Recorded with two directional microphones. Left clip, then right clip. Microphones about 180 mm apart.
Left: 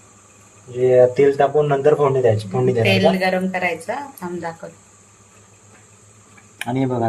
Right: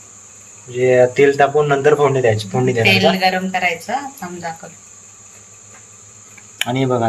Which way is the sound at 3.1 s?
70° left (ahead or behind).